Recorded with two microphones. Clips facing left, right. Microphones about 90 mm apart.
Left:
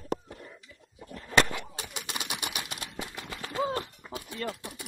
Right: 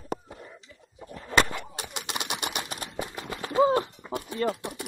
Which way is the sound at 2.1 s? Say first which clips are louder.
Right 4 dB; 65° right (ahead or behind).